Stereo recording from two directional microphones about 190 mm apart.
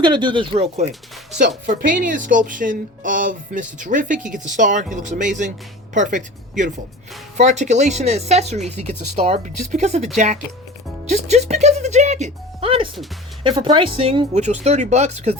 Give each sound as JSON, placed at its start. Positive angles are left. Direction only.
{"t": 0.0, "sound": "speech", "side_deg": -25}
{"t": 1.4, "sound": "a woman's voice", "side_deg": -45}
{"t": 11.1, "sound": "speech", "side_deg": -35}